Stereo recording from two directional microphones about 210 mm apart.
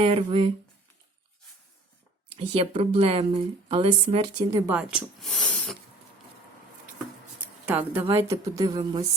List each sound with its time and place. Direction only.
0.0 s speech: 25° right (ahead or behind)
2.3 s speech: 25° right (ahead or behind)
4.5 s speech: 10° right (ahead or behind)
7.6 s speech: 5° right (ahead or behind)